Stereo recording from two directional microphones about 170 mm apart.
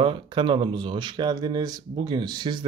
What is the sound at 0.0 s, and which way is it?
Speech, 30° right (ahead or behind).